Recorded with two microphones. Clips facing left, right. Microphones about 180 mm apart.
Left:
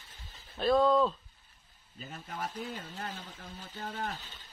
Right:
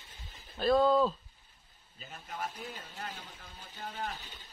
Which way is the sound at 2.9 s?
35° left (ahead or behind).